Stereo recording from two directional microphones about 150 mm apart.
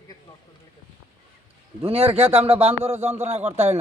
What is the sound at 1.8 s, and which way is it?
A man's voice, 40° right (ahead or behind).